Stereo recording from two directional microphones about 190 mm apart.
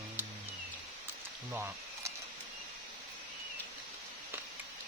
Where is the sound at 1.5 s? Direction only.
15° right (ahead or behind).